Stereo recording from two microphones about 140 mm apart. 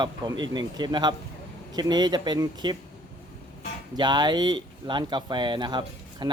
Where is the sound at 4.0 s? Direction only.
30° right (ahead or behind).